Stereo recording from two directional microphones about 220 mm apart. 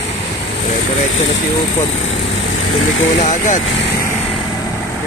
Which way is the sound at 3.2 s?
35° left (ahead or behind).